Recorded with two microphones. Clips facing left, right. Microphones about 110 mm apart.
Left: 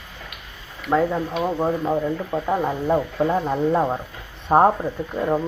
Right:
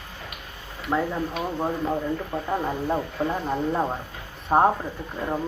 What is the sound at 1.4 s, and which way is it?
Speech, 20° left (ahead or behind).